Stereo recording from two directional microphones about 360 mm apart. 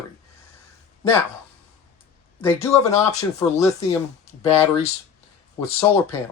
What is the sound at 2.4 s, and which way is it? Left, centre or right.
Speech, centre.